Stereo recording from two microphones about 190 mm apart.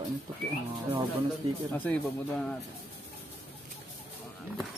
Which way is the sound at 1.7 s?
5° left (ahead or behind).